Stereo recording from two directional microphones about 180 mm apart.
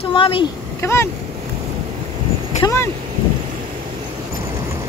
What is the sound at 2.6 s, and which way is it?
Speech, 15° left (ahead or behind).